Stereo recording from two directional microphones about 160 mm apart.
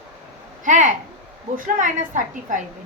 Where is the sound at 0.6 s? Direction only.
50° right (ahead or behind).